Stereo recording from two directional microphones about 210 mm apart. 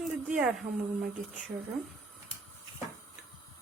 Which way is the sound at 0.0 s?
Centre (ahead or behind).